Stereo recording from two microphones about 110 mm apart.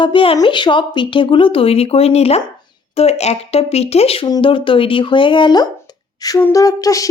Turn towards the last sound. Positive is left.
turn(degrees=30)  # may be behind; listen again after turning